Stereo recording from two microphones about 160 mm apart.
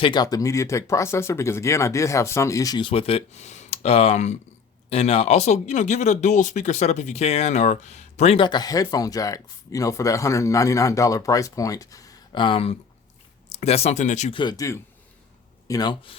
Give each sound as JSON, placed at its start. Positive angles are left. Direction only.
{"t": 0.0, "sound": "speech", "side_deg": 25}
{"t": 8.4, "sound": "speech", "side_deg": 25}
{"t": 14.3, "sound": "speech", "side_deg": 25}